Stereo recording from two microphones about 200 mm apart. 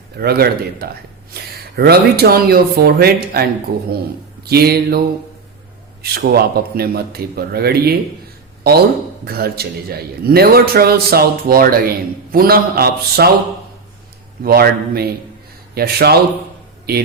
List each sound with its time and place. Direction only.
0.2 s a man's voice: 50° right (ahead or behind)
6.0 s a man's voice: 50° right (ahead or behind)
9.2 s a man's voice: 50° right (ahead or behind)
14.4 s a man's voice: 50° right (ahead or behind)